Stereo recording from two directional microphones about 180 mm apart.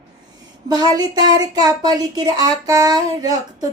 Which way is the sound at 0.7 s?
20° right (ahead or behind).